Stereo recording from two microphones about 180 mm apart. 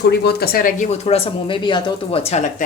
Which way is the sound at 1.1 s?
30° left (ahead or behind).